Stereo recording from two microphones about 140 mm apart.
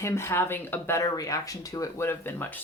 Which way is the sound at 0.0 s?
20° left (ahead or behind).